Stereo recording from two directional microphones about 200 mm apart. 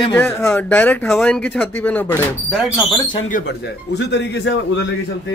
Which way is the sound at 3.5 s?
60° left (ahead or behind).